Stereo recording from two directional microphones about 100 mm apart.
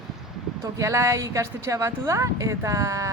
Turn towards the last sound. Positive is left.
turn(degrees=-35)  # may be behind; listen again after turning